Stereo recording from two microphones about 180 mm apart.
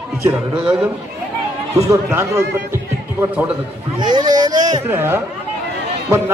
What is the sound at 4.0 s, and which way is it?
A man's voice, 25° right (ahead or behind).